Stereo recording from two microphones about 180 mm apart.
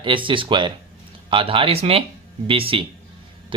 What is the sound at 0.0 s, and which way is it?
Speech, 30° right (ahead or behind).